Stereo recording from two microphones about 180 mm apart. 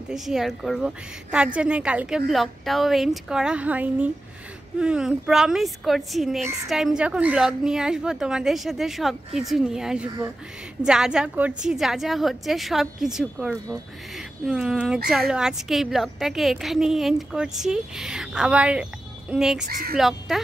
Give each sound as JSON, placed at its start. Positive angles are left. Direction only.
{"t": 0.1, "sound": "speech", "side_deg": 0}
{"t": 19.7, "sound": "speech", "side_deg": -55}
{"t": 20.0, "sound": "speech", "side_deg": 0}